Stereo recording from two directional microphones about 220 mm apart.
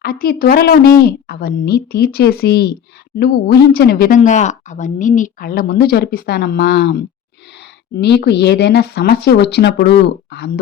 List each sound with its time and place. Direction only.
0.0 s speech: 40° left (ahead or behind)